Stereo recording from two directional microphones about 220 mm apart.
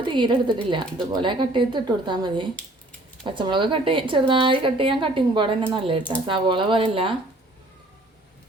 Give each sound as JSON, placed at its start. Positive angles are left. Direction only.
{"t": 0.0, "sound": "a woman's voice", "side_deg": -20}